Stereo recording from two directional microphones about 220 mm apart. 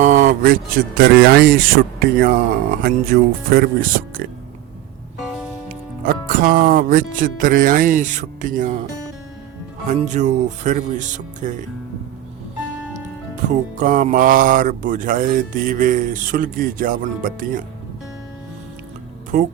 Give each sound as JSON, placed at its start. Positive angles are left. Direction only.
{"t": 0.0, "sound": "speech", "side_deg": -35}
{"t": 6.0, "sound": "speech", "side_deg": -40}
{"t": 9.9, "sound": "speech", "side_deg": -35}
{"t": 13.3, "sound": "speech", "side_deg": -35}
{"t": 19.3, "sound": "speech", "side_deg": -35}